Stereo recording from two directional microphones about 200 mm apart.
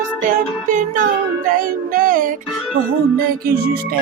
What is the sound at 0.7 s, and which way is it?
Music, 40° right (ahead or behind).